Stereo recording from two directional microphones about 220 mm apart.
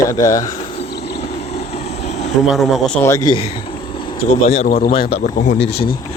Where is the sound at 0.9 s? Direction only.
45° left (ahead or behind).